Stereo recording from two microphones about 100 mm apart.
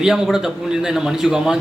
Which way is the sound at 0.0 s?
5° right (ahead or behind).